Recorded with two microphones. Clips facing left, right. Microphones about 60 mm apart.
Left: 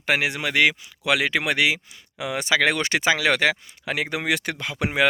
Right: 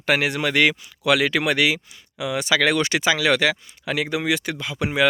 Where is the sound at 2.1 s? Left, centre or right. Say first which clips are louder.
Right 1 dB; left.